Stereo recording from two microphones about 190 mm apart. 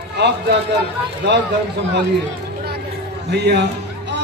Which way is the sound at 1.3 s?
65° right (ahead or behind).